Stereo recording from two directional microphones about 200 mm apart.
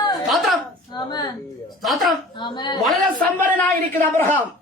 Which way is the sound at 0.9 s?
20° left (ahead or behind).